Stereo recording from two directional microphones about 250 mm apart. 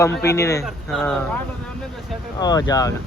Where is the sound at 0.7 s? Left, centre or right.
Centre.